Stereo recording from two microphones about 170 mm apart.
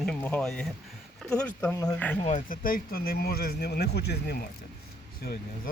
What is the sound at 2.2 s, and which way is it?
Speech, 50° left (ahead or behind).